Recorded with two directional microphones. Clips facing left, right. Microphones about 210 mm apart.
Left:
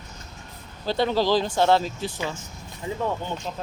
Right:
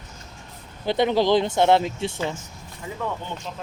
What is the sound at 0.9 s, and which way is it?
Speech, 20° right (ahead or behind).